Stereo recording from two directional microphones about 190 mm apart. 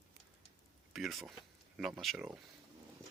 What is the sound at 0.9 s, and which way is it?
Speech, centre (ahead or behind).